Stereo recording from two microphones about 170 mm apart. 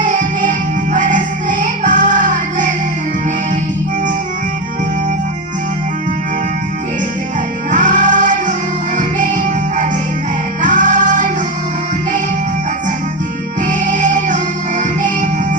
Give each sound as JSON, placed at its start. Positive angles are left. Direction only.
{"t": 0.0, "sound": "music", "side_deg": -50}
{"t": 7.7, "sound": "music", "side_deg": -50}
{"t": 13.7, "sound": "music", "side_deg": -50}